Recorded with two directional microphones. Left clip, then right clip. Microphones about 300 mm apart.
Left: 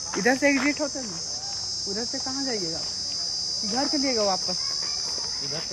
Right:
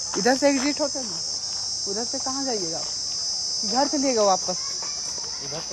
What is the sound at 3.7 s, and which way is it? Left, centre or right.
Speech, centre.